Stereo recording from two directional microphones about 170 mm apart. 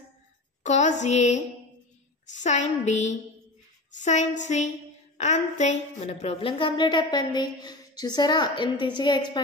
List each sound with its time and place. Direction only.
0.7 s a woman's voice: 45° left (ahead or behind); by 9.4 s 25° left (ahead or behind)